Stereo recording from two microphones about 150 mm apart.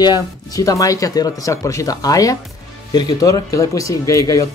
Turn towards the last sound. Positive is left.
turn(degrees=20)  # may be behind; listen again after turning